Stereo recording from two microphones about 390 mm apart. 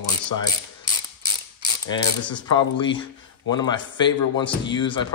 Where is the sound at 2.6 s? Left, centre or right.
Centre.